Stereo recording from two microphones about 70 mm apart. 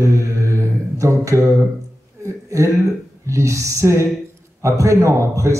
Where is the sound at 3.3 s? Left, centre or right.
Right.